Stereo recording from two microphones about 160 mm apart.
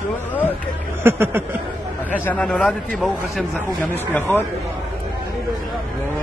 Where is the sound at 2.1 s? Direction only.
10° left (ahead or behind).